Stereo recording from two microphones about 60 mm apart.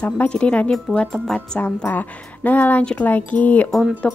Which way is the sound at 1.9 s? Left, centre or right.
Left.